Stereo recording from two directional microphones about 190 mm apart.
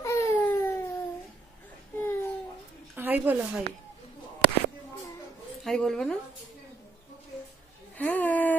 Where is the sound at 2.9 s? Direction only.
10° right (ahead or behind).